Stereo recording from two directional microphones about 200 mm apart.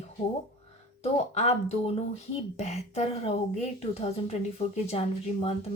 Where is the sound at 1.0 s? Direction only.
30° left (ahead or behind).